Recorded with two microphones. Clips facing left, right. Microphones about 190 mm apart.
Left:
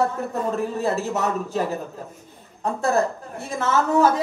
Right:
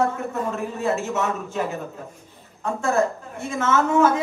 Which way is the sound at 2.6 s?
35° left (ahead or behind).